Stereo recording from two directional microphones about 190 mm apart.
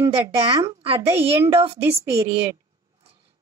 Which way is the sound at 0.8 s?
30° right (ahead or behind).